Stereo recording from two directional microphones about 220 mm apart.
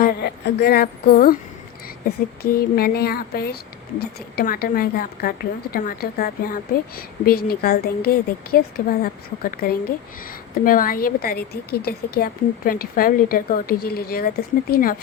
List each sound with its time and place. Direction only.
0.0 s a woman's voice: 45° left (ahead or behind)